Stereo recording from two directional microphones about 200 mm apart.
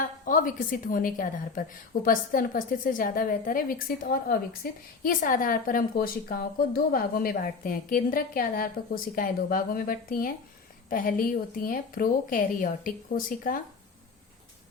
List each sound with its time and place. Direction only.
0.0 s a woman's voice: 45° left (ahead or behind)